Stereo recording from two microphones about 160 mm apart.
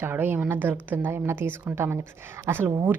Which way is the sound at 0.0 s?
15° right (ahead or behind).